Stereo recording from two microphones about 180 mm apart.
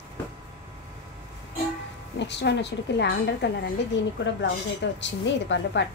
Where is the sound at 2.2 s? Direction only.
75° left (ahead or behind).